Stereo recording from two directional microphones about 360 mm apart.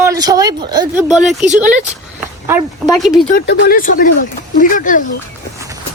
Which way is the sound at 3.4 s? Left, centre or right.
Left.